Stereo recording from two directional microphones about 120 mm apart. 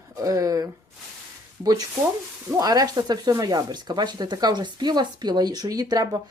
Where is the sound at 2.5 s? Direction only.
30° right (ahead or behind).